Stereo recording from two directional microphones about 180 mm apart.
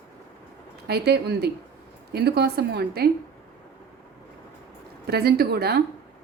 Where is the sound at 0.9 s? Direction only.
60° right (ahead or behind).